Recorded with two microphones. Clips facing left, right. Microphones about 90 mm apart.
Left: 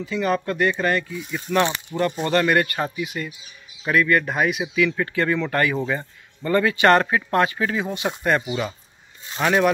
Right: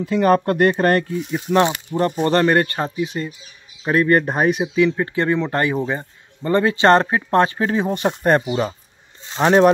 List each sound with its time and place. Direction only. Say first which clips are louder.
0.0 s speech: right 7 dB; 50° right (ahead or behind)
1.3 s speech: right 4 dB; 30° right (ahead or behind)